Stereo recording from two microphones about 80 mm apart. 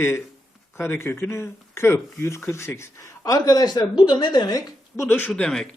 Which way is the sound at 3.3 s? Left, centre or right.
Left.